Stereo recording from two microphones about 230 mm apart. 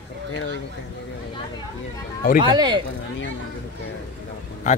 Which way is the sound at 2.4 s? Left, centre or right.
Centre.